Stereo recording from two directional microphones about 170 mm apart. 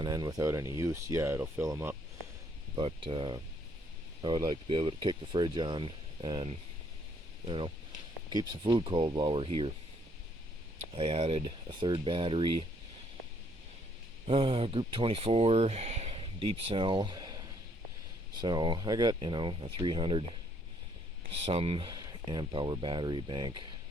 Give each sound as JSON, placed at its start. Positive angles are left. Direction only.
{"t": 0.0, "sound": "speech", "side_deg": -25}
{"t": 2.7, "sound": "speech", "side_deg": -30}
{"t": 10.9, "sound": "speech", "side_deg": -35}
{"t": 14.3, "sound": "speech", "side_deg": -35}
{"t": 21.4, "sound": "speech", "side_deg": -35}